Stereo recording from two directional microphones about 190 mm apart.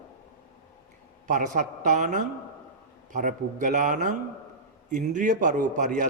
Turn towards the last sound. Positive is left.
turn(degrees=-40)  # may be behind; listen again after turning